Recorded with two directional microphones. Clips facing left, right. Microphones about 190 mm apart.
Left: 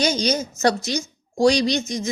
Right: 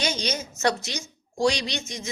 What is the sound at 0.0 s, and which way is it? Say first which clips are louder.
A woman's voice: left 7 dB; 40° left (ahead or behind).